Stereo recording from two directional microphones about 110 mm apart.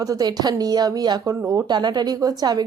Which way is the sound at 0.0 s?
35° right (ahead or behind).